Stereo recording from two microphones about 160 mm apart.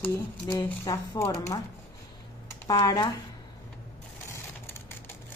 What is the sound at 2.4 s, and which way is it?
Speech, 20° left (ahead or behind).